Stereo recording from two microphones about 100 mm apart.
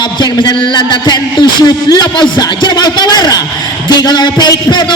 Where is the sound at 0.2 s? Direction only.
50° left (ahead or behind).